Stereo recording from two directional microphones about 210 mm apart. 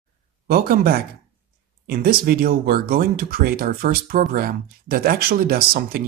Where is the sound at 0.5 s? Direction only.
45° right (ahead or behind).